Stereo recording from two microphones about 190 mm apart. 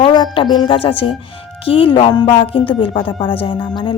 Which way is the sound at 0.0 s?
25° left (ahead or behind).